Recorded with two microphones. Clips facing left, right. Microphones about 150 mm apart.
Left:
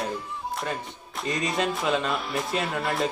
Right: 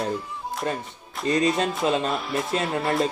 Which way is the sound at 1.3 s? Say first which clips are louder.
Right 5 dB; 35° right (ahead or behind).